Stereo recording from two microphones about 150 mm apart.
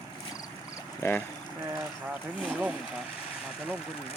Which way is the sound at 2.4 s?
5° right (ahead or behind).